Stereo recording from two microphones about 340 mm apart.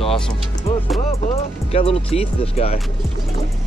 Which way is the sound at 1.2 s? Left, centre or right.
Centre.